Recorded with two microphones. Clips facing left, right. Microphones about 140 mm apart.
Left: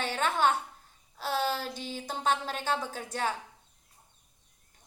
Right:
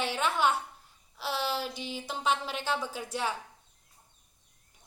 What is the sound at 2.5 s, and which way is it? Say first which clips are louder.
Speech: left 1 dB; 45° left (ahead or behind).